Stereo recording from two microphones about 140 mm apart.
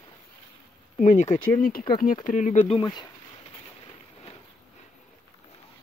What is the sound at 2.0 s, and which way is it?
Speech, 70° left (ahead or behind).